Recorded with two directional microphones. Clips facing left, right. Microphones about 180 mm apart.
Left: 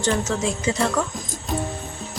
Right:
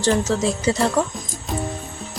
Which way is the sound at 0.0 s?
35° right (ahead or behind).